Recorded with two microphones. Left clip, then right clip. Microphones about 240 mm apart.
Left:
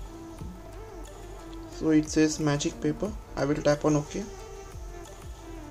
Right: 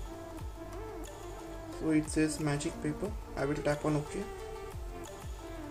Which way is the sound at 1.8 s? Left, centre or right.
Centre.